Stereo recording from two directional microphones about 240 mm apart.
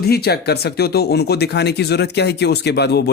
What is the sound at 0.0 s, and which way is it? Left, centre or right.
Speech, left.